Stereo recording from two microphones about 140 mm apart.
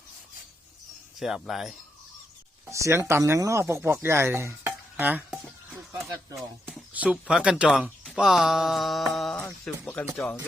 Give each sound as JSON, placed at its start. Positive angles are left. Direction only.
{"t": 1.2, "sound": "speech", "side_deg": 0}
{"t": 2.6, "sound": "speech", "side_deg": -20}